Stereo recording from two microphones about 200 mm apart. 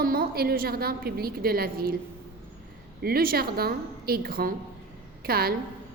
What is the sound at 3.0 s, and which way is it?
A woman's voice, 50° right (ahead or behind).